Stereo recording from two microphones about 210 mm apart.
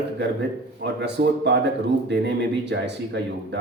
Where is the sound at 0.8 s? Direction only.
55° right (ahead or behind).